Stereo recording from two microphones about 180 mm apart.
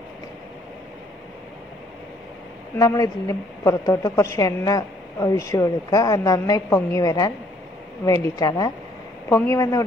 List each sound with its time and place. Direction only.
2.8 s a woman's voice: 20° left (ahead or behind)